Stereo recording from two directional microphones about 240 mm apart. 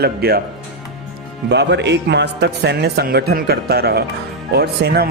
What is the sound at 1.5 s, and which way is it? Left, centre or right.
A man's voice, right.